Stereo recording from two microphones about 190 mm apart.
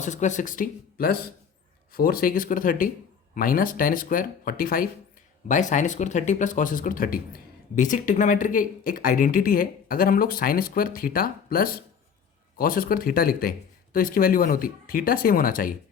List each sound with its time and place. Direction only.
0.0 s speech: 40° left (ahead or behind)